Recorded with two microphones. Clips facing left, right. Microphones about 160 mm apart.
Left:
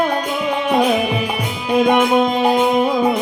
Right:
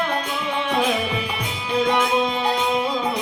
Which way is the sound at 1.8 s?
55° left (ahead or behind).